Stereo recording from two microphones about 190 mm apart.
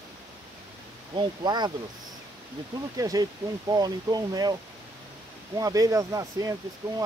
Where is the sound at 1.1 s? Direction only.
25° right (ahead or behind).